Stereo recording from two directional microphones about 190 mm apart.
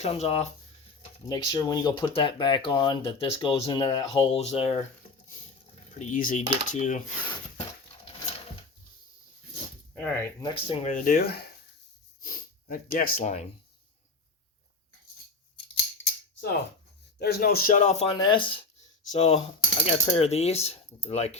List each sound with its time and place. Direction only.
0.0 s coin: 35° left (ahead or behind)
1.3 s speech: 20° left (ahead or behind)
6.0 s coin: 45° left (ahead or behind)
10.0 s speech: 5° left (ahead or behind)
10.4 s speech: 30° left (ahead or behind)
10.9 s speech: 50° left (ahead or behind)
17.2 s speech: 55° left (ahead or behind); by 18.1 s 40° left (ahead or behind)
18.1 s speech: 25° left (ahead or behind)
19.1 s coin: 35° left (ahead or behind)